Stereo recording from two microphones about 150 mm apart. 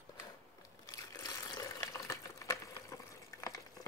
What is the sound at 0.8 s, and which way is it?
Water, 20° left (ahead or behind).